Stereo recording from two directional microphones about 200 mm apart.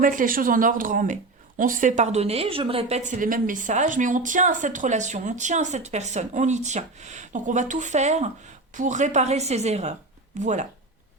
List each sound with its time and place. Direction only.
0.0 s speech: 40° right (ahead or behind)